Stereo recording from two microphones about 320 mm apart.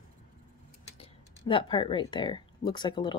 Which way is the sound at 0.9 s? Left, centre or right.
Centre.